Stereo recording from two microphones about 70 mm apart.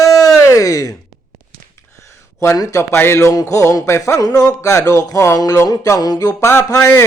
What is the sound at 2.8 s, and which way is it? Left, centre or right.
Music, left.